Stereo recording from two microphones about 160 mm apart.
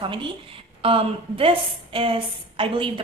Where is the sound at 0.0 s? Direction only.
30° right (ahead or behind).